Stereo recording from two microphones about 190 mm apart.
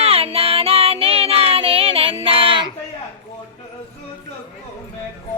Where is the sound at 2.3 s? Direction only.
30° right (ahead or behind).